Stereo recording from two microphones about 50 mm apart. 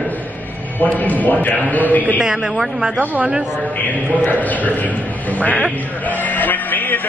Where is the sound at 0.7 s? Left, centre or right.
Left.